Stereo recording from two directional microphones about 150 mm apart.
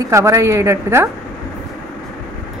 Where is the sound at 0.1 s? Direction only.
20° right (ahead or behind).